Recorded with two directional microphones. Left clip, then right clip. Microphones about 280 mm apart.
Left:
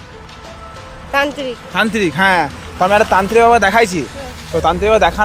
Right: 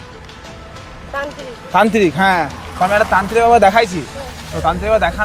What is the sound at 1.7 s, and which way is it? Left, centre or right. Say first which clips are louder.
A man's voice: right 4 dB; centre.